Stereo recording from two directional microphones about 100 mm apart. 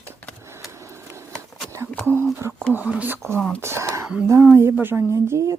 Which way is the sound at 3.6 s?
25° right (ahead or behind).